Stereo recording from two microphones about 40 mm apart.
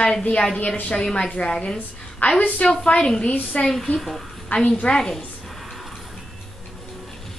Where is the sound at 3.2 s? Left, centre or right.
Left.